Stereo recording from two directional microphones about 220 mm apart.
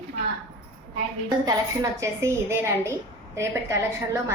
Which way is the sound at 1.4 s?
15° right (ahead or behind).